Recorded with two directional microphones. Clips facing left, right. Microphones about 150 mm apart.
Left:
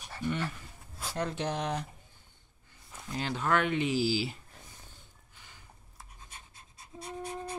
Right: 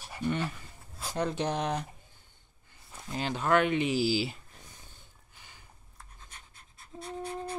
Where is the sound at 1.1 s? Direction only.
20° right (ahead or behind).